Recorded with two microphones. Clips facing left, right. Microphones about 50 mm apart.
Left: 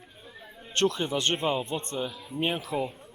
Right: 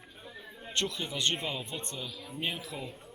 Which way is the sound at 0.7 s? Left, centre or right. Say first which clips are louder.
Left 8 dB; left.